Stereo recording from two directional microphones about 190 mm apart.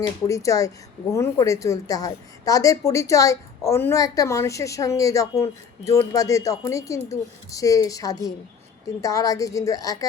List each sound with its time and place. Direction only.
0.0 s a woman's voice: 15° left (ahead or behind)